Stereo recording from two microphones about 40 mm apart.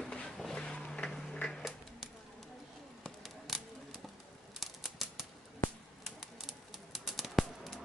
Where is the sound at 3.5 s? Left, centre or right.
Centre.